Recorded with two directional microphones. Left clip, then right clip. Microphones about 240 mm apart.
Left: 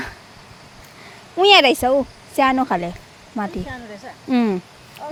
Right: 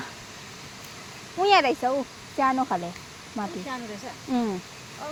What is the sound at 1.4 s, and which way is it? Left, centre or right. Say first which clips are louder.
Speech: left 8 dB; left.